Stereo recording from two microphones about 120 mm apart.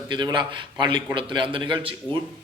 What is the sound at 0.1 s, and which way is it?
A man's voice, 40° right (ahead or behind).